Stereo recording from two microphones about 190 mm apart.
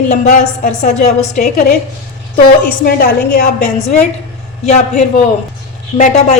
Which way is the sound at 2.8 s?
50° left (ahead or behind).